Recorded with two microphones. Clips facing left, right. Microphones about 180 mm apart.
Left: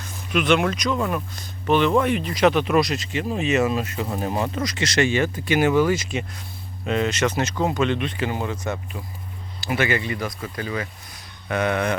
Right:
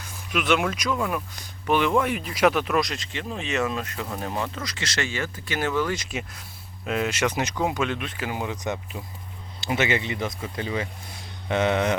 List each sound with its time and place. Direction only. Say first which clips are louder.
0.0 s speech: left 4 dB; 5° right (ahead or behind); by 11.9 s 20° right (ahead or behind)